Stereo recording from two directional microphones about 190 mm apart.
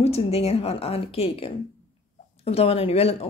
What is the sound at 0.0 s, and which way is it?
Speech, 30° left (ahead or behind).